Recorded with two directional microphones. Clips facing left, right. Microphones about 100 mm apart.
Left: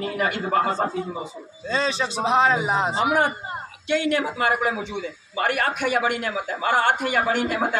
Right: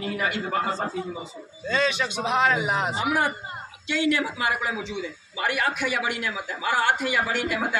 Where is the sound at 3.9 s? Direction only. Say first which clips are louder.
Left 2 dB; 50° left (ahead or behind).